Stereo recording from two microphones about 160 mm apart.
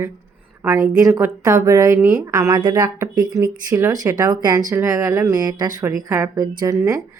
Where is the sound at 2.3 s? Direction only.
20° right (ahead or behind).